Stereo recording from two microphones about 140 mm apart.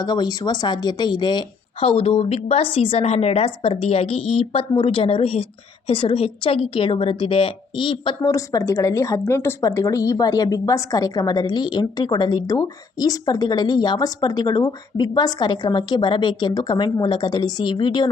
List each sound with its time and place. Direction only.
0.0 s a woman's voice: 30° left (ahead or behind)
8.3 s speech: 20° left (ahead or behind)